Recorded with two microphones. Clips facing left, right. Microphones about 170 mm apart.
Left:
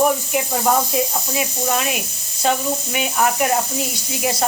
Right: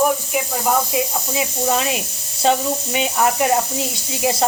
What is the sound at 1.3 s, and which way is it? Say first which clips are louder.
A woman's voice: right 3 dB; 25° right (ahead or behind).